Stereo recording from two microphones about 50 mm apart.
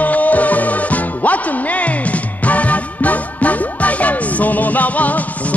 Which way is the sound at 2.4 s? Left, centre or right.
Left.